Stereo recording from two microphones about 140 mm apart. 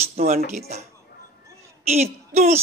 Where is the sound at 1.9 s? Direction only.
50° right (ahead or behind).